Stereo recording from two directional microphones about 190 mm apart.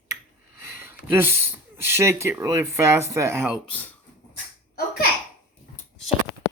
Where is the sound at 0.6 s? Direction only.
10° right (ahead or behind).